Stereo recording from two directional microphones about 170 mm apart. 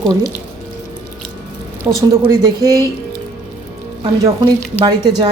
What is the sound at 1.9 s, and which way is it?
Speech, 20° right (ahead or behind).